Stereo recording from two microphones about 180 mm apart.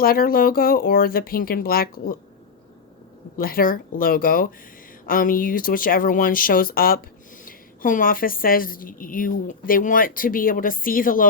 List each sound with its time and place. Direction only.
0.0 s speech: 55° left (ahead or behind)
3.3 s a woman's voice: 55° left (ahead or behind)